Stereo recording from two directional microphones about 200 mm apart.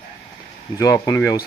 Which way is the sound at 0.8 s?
15° left (ahead or behind).